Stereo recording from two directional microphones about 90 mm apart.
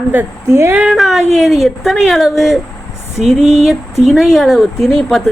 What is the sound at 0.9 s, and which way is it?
Speech, centre (ahead or behind).